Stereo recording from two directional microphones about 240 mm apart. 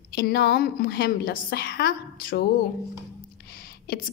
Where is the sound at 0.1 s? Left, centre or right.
Left.